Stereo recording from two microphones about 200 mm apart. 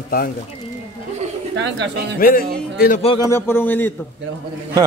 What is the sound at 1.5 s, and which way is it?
Speech, 65° right (ahead or behind).